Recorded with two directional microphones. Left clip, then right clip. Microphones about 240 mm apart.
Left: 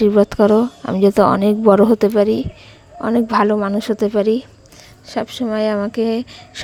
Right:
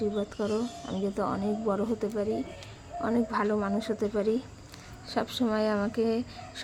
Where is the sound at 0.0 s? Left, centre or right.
Left.